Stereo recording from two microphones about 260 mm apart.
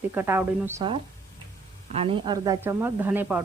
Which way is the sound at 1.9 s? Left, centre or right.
Right.